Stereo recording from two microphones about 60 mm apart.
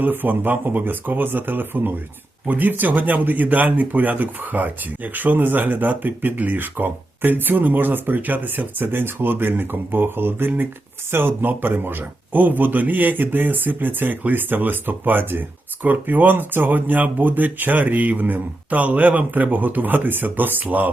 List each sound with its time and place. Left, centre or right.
0.0 s speech: right